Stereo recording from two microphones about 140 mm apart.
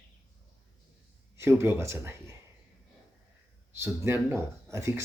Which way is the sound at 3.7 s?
15° right (ahead or behind).